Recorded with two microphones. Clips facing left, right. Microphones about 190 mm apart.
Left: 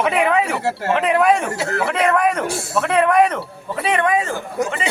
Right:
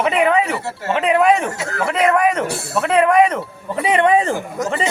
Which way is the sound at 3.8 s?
25° right (ahead or behind).